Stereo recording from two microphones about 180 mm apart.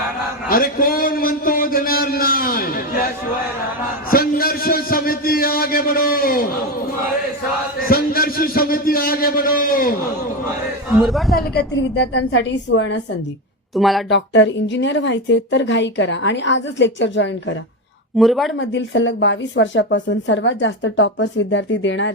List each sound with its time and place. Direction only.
0.4 s a sound: 50° left (ahead or behind)
4.1 s a man's voice: 55° left (ahead or behind)
7.8 s a man's voice: 55° left (ahead or behind)
11.0 s speech: centre (ahead or behind)
11.3 s a woman's voice: 70° left (ahead or behind); by 13.0 s 90° left
13.7 s speech: centre (ahead or behind)
14.1 s a woman's voice: 85° left
18.2 s speech: centre (ahead or behind)
18.6 s a woman's voice: 90° left